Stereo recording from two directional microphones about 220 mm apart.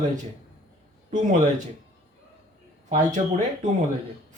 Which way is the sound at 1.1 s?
35° right (ahead or behind).